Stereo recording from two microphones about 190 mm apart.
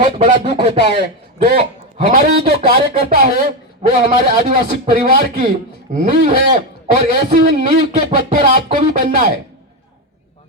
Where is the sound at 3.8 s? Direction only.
40° right (ahead or behind).